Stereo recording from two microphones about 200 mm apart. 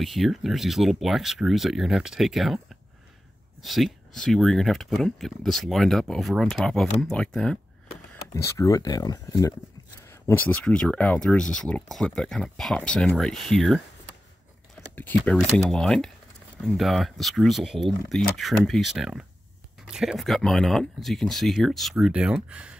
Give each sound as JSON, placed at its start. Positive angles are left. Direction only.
{"t": 0.0, "sound": "speech", "side_deg": 0}
{"t": 8.5, "sound": "speech", "side_deg": 15}
{"t": 15.0, "sound": "speech", "side_deg": 10}